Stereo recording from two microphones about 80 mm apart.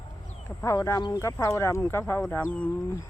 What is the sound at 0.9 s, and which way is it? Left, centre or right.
Speech, left.